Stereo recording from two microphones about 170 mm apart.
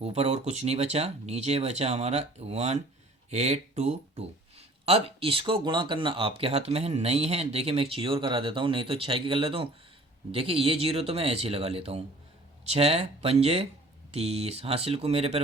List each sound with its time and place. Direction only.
0.0 s speech: 40° right (ahead or behind)